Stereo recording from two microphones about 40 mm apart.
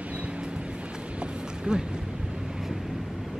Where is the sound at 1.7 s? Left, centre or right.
Right.